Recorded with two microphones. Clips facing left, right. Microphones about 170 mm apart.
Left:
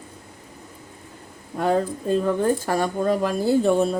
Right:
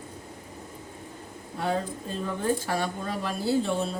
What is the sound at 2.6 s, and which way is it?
Speech, 45° left (ahead or behind).